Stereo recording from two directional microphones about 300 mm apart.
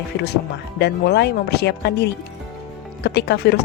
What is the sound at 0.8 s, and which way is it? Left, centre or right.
Speech, left.